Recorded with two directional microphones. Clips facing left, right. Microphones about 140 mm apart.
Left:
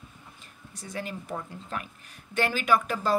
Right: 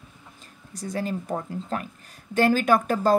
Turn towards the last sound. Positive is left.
turn(degrees=-45)  # may be behind; listen again after turning